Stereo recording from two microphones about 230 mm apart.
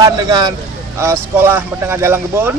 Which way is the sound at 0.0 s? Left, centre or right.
Centre.